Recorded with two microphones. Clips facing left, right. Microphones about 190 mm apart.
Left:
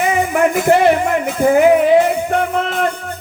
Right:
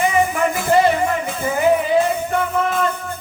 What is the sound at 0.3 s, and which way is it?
Music, 70° left (ahead or behind).